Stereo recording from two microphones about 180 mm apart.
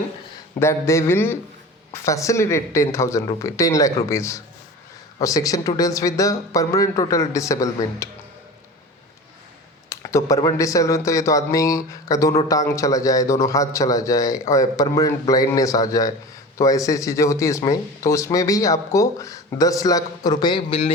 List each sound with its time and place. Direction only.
0.6 s speech: 15° left (ahead or behind)
9.9 s speech: 15° left (ahead or behind)